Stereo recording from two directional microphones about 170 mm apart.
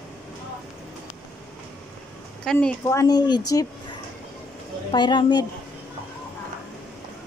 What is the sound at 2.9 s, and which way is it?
Speech, 20° left (ahead or behind).